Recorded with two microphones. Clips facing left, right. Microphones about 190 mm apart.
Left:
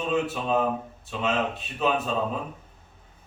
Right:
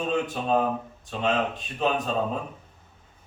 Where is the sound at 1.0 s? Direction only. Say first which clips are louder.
Right 1 dB; 5° left (ahead or behind).